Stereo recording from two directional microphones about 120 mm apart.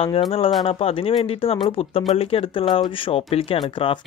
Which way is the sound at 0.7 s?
55° left (ahead or behind).